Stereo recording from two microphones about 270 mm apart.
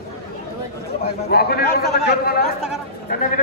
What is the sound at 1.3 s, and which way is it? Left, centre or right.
A man's voice, left.